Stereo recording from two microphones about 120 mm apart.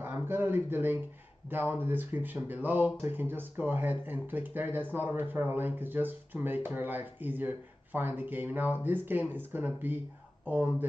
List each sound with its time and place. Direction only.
0.0 s speech: 15° right (ahead or behind)